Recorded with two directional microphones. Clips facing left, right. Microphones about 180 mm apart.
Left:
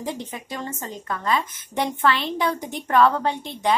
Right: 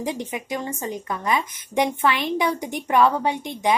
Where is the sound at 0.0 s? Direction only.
15° right (ahead or behind).